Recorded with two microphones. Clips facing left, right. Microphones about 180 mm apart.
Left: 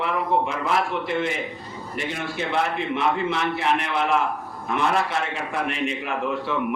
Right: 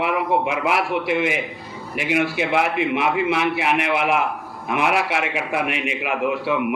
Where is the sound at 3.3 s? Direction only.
75° right (ahead or behind).